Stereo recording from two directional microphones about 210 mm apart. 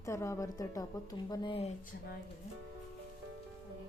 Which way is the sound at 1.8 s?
40° left (ahead or behind).